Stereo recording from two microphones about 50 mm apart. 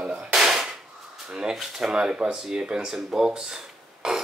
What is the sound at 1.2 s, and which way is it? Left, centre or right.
Speech, centre.